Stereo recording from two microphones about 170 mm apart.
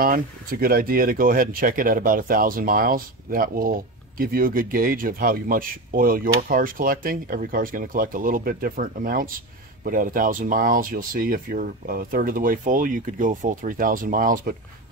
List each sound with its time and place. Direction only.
0.0 s speech: 60° right (ahead or behind)